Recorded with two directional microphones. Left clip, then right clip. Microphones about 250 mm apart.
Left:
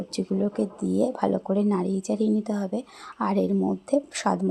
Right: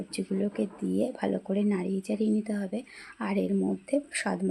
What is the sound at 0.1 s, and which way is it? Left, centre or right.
Speech, centre.